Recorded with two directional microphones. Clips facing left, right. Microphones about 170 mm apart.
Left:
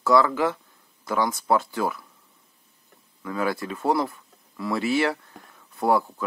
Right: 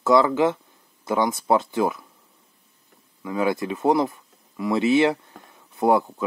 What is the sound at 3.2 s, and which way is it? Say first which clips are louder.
Speech: right 3 dB; 20° right (ahead or behind).